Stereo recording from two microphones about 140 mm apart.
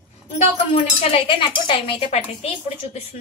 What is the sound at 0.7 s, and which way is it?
Speech, 40° left (ahead or behind).